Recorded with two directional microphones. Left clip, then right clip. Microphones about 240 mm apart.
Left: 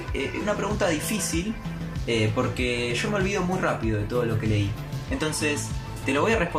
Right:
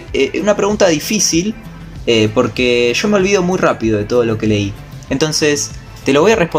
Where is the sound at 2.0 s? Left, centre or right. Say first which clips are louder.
Right 13 dB; right.